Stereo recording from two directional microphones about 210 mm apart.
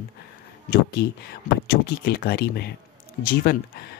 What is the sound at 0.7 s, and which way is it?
Speech, 50° left (ahead or behind).